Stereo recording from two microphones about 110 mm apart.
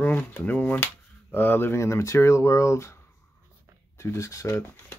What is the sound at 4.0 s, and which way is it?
Speech, 25° left (ahead or behind).